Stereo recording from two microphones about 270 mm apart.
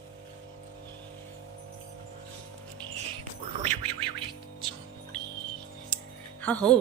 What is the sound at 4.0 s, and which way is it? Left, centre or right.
Music, centre.